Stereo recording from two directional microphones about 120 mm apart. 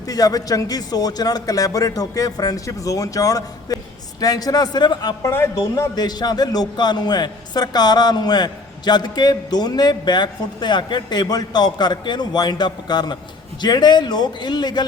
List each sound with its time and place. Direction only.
0.0 s a man's voice: 30° left (ahead or behind)
5.3 s a man's voice: 25° left (ahead or behind)